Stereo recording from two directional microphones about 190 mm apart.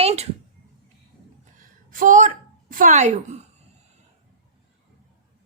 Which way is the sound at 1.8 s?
45° right (ahead or behind).